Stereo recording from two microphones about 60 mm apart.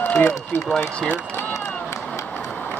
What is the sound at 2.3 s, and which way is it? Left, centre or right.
Vehicle, left.